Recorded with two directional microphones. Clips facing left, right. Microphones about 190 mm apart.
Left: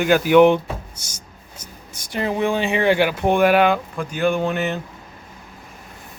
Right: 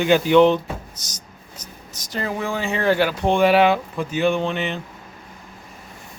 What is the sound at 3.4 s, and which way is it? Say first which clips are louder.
Speech: right 1 dB; centre (ahead or behind).